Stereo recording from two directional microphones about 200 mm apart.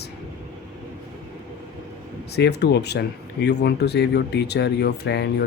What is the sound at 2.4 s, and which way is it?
Speech, 55° left (ahead or behind).